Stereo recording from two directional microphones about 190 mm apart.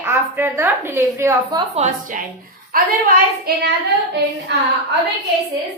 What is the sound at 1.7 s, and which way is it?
Speech, 40° right (ahead or behind).